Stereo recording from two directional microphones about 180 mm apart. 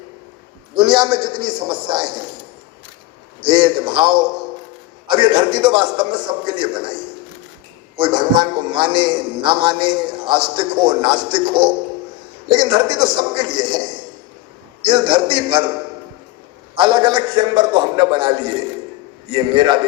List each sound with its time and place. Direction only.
0.8 s a man's voice: 25° right (ahead or behind)
3.4 s a man's voice: 25° right (ahead or behind)
7.9 s a man's voice: 25° right (ahead or behind)
16.7 s a man's voice: 25° right (ahead or behind)